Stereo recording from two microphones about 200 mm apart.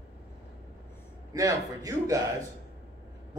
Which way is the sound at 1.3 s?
15° right (ahead or behind).